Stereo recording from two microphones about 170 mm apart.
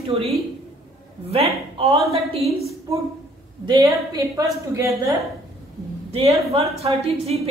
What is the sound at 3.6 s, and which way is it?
A woman's voice, 20° right (ahead or behind).